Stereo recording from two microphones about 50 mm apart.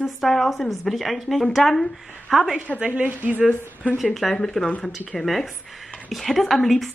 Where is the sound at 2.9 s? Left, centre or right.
Right.